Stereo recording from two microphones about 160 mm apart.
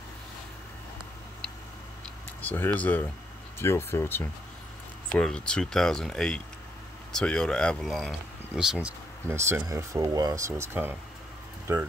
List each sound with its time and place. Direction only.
2.4 s speech: 10° left (ahead or behind); by 11.9 s 15° right (ahead or behind)